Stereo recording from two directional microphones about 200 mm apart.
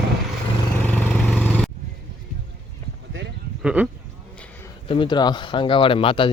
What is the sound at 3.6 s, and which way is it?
Speech, 5° right (ahead or behind).